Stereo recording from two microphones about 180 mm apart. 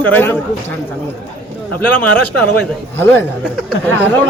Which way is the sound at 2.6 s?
10° left (ahead or behind).